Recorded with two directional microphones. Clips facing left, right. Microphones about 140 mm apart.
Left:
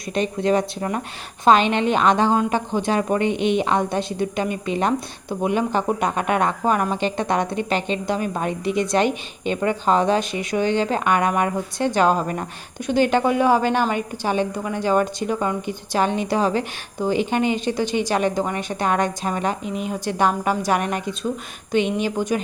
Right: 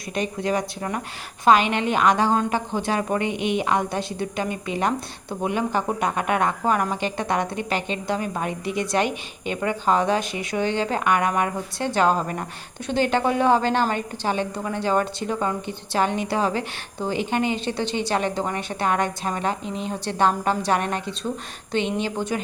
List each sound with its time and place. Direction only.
0.1 s a woman's voice: 25° left (ahead or behind)